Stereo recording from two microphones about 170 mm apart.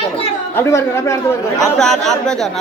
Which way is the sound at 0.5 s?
15° left (ahead or behind).